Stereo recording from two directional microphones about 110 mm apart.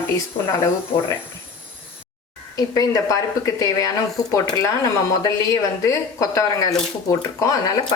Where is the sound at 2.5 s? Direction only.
35° left (ahead or behind).